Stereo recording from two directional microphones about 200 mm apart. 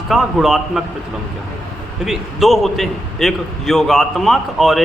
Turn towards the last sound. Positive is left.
turn(degrees=0)  # may be behind; listen again after turning